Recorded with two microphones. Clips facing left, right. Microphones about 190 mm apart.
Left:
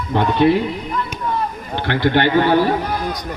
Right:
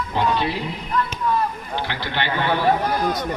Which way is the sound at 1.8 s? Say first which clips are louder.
Left 14 dB; 50° left (ahead or behind).